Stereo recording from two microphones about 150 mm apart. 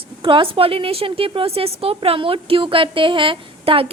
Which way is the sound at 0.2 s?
35° right (ahead or behind).